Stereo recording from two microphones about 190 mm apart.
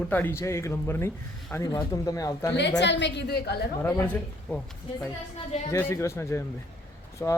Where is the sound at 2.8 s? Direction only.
70° left (ahead or behind).